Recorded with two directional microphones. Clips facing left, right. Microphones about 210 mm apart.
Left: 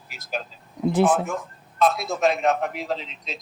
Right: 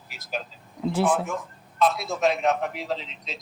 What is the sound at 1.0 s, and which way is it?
A man's voice, 45° left (ahead or behind).